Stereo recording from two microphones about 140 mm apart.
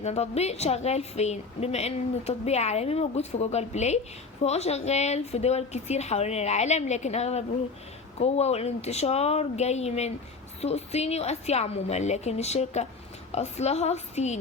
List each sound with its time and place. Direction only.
0.0 s a woman's voice: 50° left (ahead or behind)